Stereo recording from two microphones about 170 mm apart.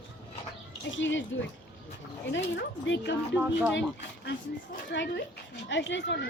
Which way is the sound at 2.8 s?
90° left.